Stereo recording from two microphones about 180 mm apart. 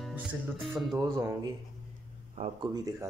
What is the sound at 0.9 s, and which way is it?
Speech, 15° right (ahead or behind).